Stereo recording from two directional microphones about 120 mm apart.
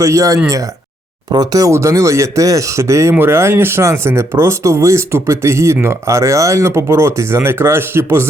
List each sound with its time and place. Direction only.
0.0 s speech: 25° right (ahead or behind)